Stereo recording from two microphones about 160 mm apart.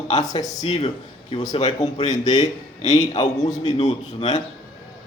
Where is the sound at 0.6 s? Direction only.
45° left (ahead or behind).